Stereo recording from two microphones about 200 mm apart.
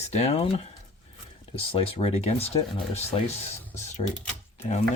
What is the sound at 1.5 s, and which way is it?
Speech, 30° left (ahead or behind).